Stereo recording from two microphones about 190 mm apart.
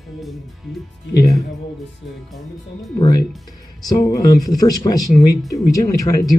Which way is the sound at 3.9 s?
20° left (ahead or behind).